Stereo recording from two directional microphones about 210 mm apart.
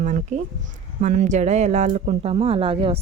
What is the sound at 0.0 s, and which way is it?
Speech, 35° right (ahead or behind).